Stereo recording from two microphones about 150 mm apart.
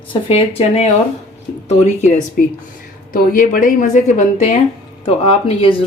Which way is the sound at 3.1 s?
65° left (ahead or behind).